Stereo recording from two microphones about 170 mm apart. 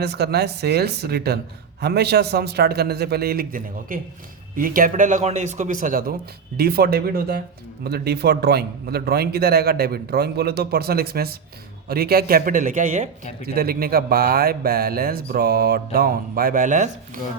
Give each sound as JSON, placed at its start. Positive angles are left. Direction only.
{"t": 0.0, "sound": "a man's voice", "side_deg": -75}
{"t": 7.9, "sound": "a man's voice", "side_deg": -70}
{"t": 13.4, "sound": "speech", "side_deg": -65}